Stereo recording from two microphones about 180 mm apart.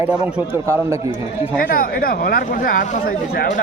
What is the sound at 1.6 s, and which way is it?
Speech, 55° left (ahead or behind).